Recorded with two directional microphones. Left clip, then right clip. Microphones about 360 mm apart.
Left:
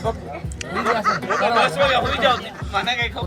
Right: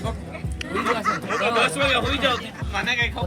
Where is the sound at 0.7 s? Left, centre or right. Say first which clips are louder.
Left 3 dB; left.